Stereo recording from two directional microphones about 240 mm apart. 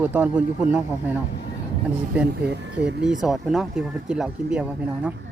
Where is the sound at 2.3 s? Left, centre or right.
Right.